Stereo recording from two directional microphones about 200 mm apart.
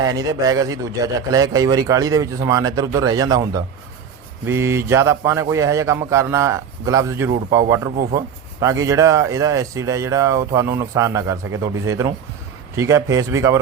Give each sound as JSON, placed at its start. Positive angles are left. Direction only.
{"t": 0.0, "sound": "a man's voice", "side_deg": -20}